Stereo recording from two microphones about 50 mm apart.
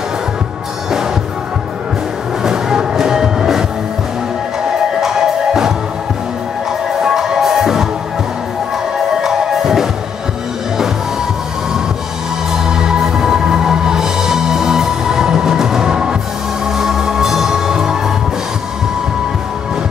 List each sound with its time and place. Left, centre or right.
2.4 s music: centre
5.0 s music: centre
7.0 s music: centre
8.9 s music: centre
12.5 s music: centre